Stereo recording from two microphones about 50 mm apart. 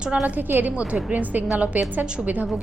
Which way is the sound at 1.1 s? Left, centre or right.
Right.